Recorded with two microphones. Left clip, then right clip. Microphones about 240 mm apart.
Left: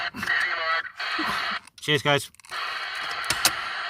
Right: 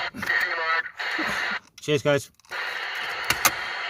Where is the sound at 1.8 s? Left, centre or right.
Centre.